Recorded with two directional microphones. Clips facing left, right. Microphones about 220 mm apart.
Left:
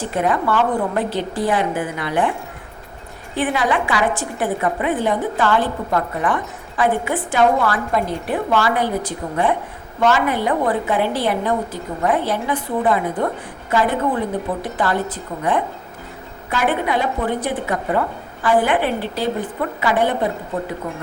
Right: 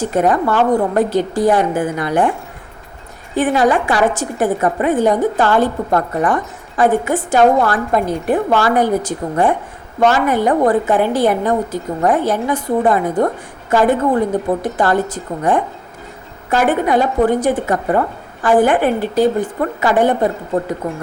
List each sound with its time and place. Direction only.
0.0 s a woman's voice: 45° right (ahead or behind)
3.3 s a woman's voice: 45° right (ahead or behind)